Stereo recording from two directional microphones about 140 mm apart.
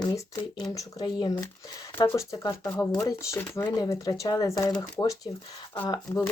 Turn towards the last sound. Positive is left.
turn(degrees=30)  # may be behind; listen again after turning